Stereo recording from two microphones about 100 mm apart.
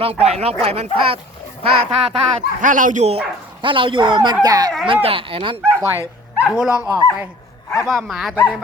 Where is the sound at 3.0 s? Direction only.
90° right.